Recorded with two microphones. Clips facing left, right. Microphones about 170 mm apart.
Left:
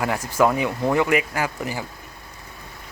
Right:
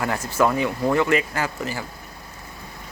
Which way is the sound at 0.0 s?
10° left (ahead or behind).